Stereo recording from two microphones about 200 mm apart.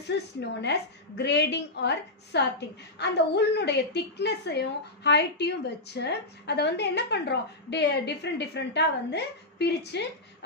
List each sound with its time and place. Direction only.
0.4 s a woman's voice: 60° left (ahead or behind)